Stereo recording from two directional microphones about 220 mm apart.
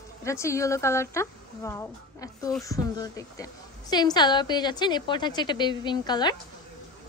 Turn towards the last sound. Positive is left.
turn(degrees=20)  # may be behind; listen again after turning